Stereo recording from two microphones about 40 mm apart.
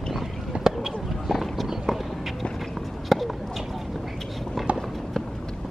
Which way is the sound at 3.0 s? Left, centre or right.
Centre.